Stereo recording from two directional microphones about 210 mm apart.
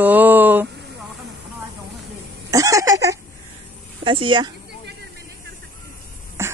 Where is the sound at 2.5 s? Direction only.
15° right (ahead or behind).